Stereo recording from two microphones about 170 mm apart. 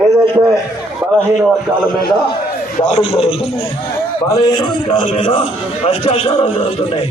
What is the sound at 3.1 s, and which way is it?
Speech, 35° left (ahead or behind).